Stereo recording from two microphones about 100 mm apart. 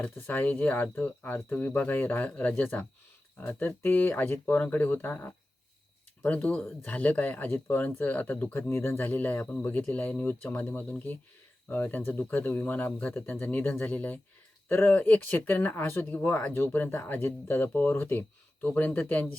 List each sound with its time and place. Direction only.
0.0 s speech: 15° left (ahead or behind)